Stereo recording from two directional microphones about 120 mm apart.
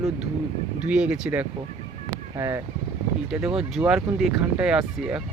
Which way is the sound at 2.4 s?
20° right (ahead or behind).